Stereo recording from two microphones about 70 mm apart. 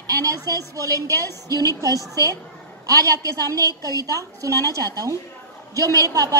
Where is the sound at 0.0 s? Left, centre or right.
Right.